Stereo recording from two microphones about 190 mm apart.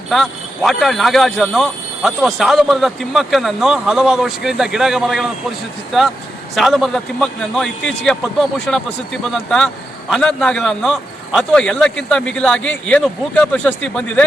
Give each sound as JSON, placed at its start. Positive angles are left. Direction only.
{"t": 0.1, "sound": "speech", "side_deg": 0}
{"t": 6.6, "sound": "speech", "side_deg": 0}